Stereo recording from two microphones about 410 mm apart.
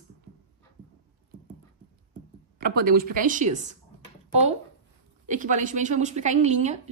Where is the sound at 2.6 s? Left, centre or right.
Right.